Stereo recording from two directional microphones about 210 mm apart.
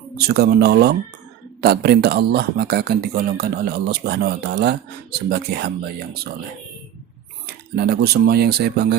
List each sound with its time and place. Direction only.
0.2 s speech: 50° right (ahead or behind)
7.4 s speech: 50° right (ahead or behind)